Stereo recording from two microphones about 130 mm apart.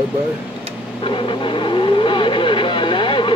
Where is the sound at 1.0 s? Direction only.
40° left (ahead or behind).